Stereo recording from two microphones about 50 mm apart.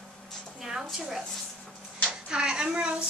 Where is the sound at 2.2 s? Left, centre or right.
Centre.